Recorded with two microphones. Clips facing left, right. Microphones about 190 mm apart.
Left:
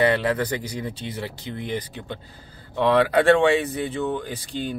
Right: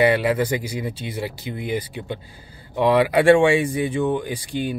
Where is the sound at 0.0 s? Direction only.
10° right (ahead or behind).